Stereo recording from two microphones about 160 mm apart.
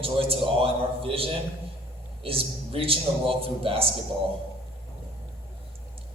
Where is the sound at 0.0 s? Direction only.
35° right (ahead or behind).